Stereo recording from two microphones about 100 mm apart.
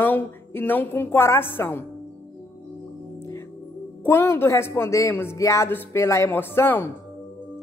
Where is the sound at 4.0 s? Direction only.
20° left (ahead or behind).